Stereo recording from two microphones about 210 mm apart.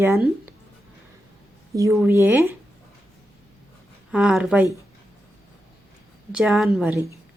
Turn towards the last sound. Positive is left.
turn(degrees=-5)  # may be behind; listen again after turning